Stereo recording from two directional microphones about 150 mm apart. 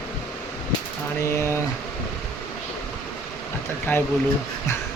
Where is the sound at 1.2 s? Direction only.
20° left (ahead or behind).